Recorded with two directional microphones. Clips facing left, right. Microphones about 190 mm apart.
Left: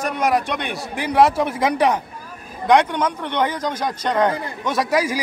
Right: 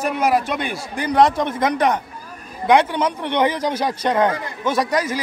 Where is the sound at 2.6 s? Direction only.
5° right (ahead or behind).